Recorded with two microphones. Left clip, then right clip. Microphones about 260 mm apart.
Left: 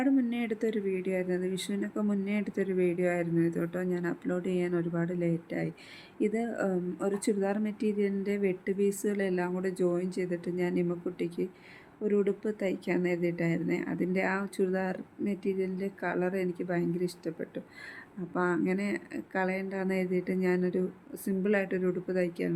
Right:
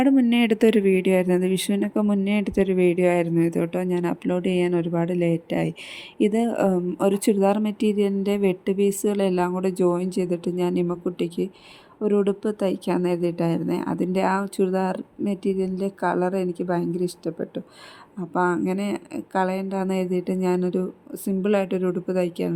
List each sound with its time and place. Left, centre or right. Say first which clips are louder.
0.0 s speech: right 10 dB; right